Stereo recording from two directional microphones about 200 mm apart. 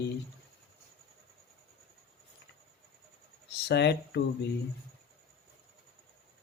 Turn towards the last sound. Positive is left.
turn(degrees=55)  # may be behind; listen again after turning